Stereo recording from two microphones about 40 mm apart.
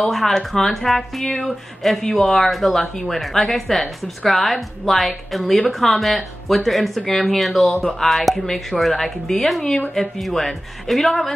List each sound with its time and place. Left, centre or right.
0.0 s speech: centre